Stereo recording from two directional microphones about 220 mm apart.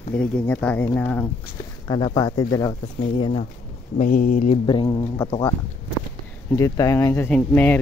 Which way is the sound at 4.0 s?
40° left (ahead or behind).